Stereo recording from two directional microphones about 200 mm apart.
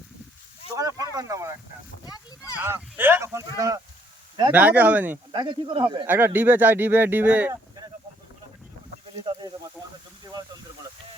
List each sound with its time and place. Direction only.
0.8 s speech: 15° right (ahead or behind)
2.6 s speech: 10° right (ahead or behind)
5.3 s a man's voice: 25° right (ahead or behind)
6.1 s speech: 10° right (ahead or behind)